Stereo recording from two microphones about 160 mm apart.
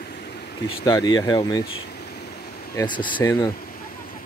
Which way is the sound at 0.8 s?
25° left (ahead or behind).